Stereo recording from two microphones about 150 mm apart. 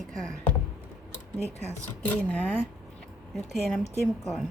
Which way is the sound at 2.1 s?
10° left (ahead or behind).